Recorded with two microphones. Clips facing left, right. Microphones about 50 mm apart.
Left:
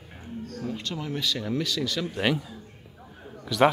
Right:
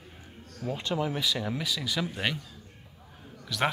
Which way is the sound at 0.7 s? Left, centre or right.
Centre.